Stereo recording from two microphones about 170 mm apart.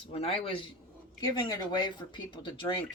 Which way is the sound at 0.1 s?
35° left (ahead or behind).